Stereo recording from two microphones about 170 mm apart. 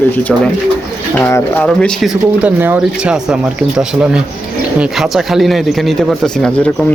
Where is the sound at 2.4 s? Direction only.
10° right (ahead or behind).